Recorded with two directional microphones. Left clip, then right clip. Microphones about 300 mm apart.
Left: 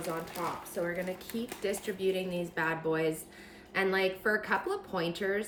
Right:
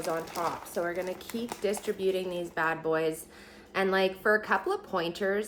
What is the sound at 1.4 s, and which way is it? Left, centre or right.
A woman's voice, centre.